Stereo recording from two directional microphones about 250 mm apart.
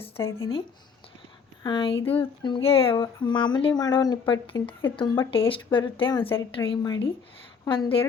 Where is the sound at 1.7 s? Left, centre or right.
Centre.